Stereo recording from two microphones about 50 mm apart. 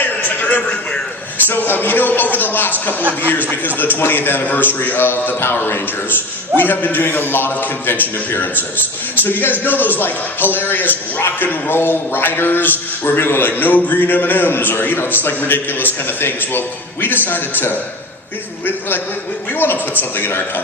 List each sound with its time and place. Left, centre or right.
0.0 s a sound: left
1.5 s a man's voice: left
4.0 s a man's voice: left
19.5 s a man's voice: left